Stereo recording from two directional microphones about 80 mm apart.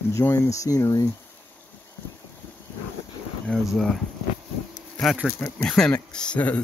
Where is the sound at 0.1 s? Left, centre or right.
Left.